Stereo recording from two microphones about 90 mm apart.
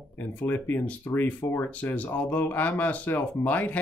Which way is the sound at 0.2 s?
20° left (ahead or behind).